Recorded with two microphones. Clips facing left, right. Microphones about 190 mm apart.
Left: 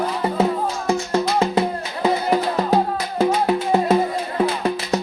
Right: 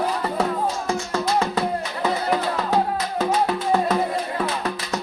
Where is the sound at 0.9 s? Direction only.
25° left (ahead or behind).